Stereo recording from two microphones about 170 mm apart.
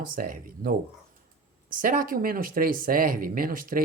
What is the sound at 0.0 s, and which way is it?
Speech, 55° right (ahead or behind).